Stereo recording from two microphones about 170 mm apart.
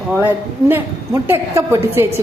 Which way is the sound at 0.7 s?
15° right (ahead or behind).